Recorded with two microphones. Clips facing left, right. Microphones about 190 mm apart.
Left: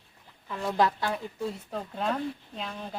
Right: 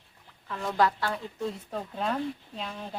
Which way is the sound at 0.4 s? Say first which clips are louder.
Even; 10° left (ahead or behind).